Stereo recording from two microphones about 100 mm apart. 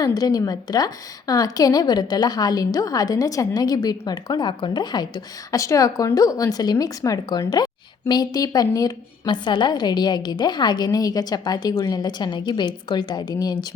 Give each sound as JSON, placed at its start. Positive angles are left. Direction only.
{"t": 0.0, "sound": "a woman's voice", "side_deg": 40}